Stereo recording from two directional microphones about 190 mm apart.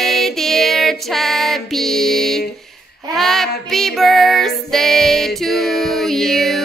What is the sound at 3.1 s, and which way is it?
Child singing, centre (ahead or behind).